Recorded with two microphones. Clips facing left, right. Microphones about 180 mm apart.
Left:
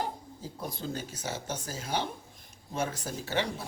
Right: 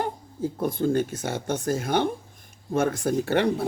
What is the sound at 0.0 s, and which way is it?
Speech, 60° right (ahead or behind).